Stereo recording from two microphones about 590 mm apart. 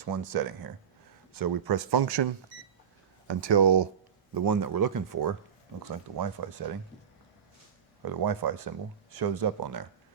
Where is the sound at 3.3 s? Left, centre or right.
Right.